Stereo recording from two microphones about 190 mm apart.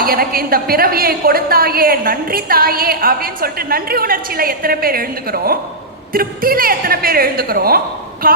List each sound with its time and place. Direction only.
0.0 s a woman's voice: 50° right (ahead or behind)